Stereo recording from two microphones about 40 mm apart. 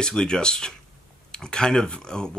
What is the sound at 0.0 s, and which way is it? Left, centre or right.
Speech, centre.